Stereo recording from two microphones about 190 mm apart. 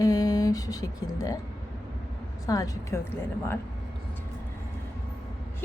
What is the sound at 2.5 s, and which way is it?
Speech, 20° left (ahead or behind).